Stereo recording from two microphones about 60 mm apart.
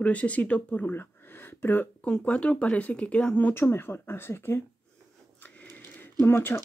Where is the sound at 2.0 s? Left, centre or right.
Centre.